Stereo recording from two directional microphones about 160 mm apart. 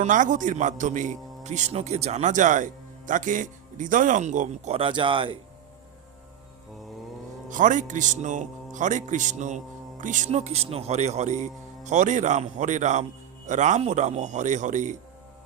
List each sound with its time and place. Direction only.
0.0 s a man's voice: 55° right (ahead or behind); by 5.4 s 30° right (ahead or behind)
7.5 s a man's voice: 50° right (ahead or behind)